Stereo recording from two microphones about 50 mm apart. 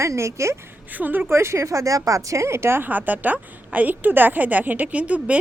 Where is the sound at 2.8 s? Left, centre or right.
Right.